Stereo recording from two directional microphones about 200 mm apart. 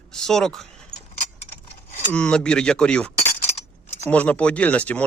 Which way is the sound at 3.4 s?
35° left (ahead or behind).